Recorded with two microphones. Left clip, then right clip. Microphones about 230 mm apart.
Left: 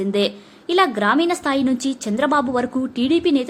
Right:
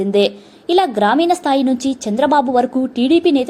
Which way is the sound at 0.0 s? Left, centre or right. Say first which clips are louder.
Right 6 dB; centre.